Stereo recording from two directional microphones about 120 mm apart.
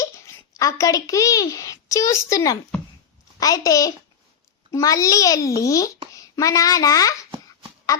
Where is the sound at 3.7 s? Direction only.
30° left (ahead or behind).